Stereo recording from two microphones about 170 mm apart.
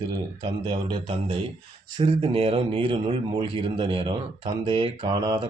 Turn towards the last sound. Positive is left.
turn(degrees=-25)  # may be behind; listen again after turning